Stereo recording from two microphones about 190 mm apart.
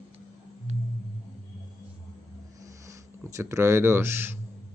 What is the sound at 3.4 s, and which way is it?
Speech, 15° right (ahead or behind).